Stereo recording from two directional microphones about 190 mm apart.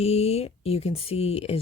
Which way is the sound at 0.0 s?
35° left (ahead or behind).